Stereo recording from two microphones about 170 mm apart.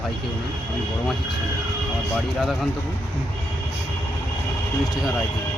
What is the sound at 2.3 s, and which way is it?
Speech, centre (ahead or behind).